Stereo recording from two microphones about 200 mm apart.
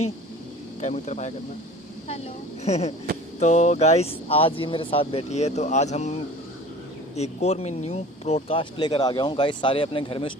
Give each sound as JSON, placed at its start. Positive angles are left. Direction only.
{"t": 0.8, "sound": "speech", "side_deg": 35}
{"t": 2.6, "sound": "speech", "side_deg": 35}
{"t": 7.2, "sound": "speech", "side_deg": 35}